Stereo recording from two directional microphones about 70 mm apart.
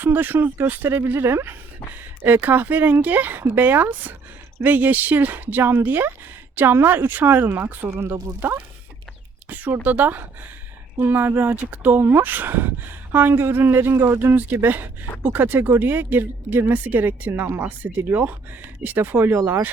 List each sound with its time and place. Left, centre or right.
0.0 s speech: right